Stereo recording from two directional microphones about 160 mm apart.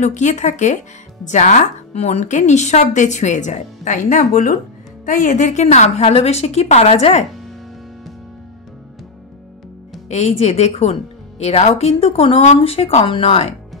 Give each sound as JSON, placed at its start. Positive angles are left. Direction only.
{"t": 0.0, "sound": "speech", "side_deg": 50}
{"t": 10.0, "sound": "a woman's voice", "side_deg": 45}